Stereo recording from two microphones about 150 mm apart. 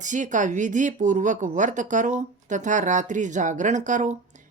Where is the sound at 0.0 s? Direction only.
55° right (ahead or behind).